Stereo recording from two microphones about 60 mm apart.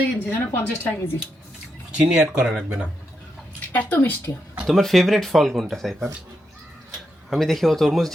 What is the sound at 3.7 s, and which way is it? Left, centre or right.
Speech, left.